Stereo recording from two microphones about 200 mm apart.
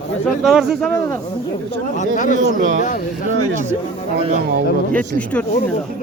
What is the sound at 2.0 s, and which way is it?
Speech, 40° left (ahead or behind).